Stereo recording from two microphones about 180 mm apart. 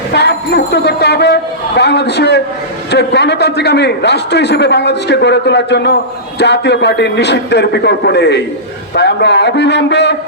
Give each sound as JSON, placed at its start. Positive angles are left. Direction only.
{"t": 0.1, "sound": "a man's voice", "side_deg": 70}